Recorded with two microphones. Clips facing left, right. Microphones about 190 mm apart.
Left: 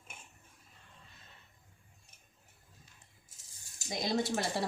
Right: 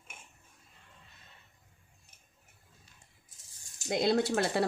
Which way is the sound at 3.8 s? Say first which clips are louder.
Right 6 dB; 65° right (ahead or behind).